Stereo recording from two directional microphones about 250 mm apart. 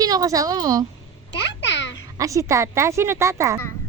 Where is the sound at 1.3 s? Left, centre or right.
Left.